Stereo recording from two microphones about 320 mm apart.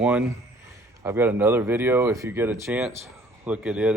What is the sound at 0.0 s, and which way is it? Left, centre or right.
Speech, centre.